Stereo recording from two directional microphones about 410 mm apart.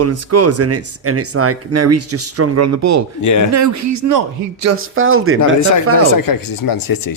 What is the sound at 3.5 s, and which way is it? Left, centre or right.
Speech, right.